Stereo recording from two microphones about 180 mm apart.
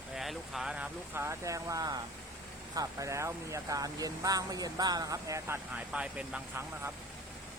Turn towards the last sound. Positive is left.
turn(degrees=-10)  # may be behind; listen again after turning